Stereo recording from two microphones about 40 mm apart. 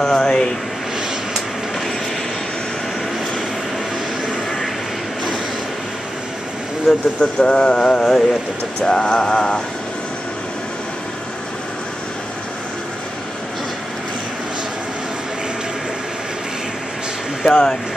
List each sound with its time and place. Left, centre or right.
0.0 s speech: centre
6.9 s speech: centre
7.3 s mantra: left
17.5 s mantra: centre